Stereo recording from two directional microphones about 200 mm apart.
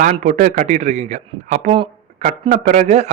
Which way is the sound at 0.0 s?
35° right (ahead or behind).